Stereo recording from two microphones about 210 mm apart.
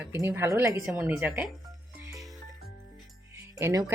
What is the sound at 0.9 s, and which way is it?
Speech, 5° right (ahead or behind).